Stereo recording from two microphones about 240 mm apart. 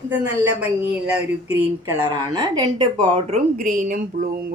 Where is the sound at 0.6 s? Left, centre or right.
Centre.